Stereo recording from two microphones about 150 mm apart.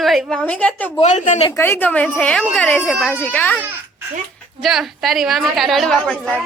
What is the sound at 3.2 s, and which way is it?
Speech, 10° left (ahead or behind).